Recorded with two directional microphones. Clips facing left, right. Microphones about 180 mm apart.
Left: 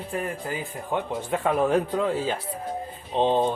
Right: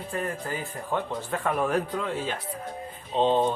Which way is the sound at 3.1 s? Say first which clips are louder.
Left 1 dB; 15° left (ahead or behind).